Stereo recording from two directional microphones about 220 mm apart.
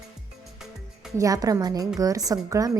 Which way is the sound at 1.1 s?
15° right (ahead or behind).